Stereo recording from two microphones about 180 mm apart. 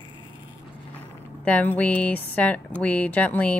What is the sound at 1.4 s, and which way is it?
Speech, 10° left (ahead or behind).